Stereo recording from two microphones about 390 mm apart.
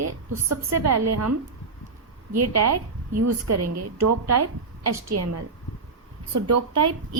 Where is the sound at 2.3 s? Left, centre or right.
Right.